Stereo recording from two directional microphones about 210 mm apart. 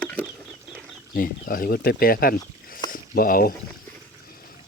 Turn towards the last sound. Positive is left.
turn(degrees=45)  # may be behind; listen again after turning